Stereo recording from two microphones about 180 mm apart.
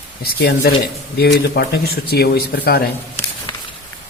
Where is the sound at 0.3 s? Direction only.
60° left (ahead or behind).